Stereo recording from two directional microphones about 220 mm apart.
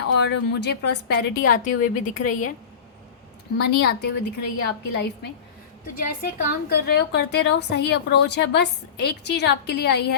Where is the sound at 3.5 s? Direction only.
50° left (ahead or behind).